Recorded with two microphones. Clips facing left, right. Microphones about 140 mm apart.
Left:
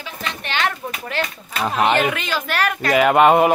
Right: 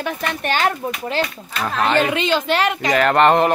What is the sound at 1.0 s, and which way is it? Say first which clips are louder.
Speech: right 3 dB; 30° right (ahead or behind).